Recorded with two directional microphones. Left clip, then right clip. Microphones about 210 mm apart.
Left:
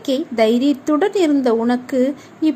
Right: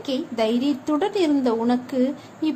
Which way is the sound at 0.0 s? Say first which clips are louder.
Left 7 dB; 20° left (ahead or behind).